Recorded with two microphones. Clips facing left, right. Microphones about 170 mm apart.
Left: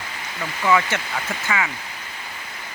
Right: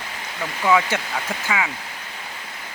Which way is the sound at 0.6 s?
10° right (ahead or behind).